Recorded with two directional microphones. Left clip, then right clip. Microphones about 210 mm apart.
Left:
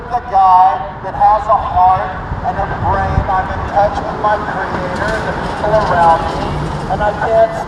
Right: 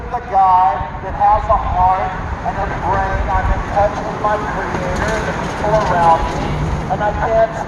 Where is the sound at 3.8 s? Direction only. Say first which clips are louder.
Left 3 dB; 35° left (ahead or behind).